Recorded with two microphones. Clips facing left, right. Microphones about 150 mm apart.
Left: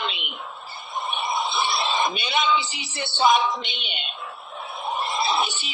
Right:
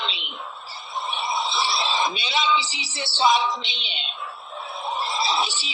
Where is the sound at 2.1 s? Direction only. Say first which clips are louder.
Left 1 dB; 50° left (ahead or behind).